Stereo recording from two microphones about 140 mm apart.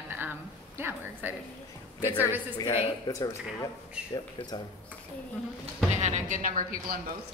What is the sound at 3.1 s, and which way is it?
Speech, 30° left (ahead or behind).